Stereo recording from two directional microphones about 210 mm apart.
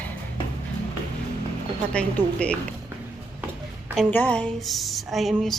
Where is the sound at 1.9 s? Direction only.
5° left (ahead or behind).